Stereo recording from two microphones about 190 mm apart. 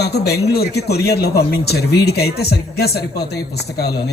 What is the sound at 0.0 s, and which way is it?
A woman's voice, 60° left (ahead or behind).